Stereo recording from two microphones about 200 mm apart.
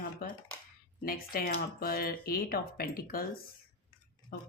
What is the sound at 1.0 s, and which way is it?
Speech, 45° left (ahead or behind).